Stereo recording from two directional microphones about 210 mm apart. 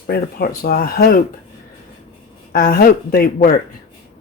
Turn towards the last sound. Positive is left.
turn(degrees=45)  # may be behind; listen again after turning